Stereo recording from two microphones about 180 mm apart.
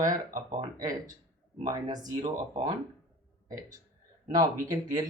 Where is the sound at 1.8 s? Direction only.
20° right (ahead or behind).